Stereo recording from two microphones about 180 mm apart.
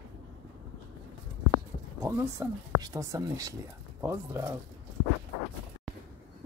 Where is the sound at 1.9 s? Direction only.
15° right (ahead or behind).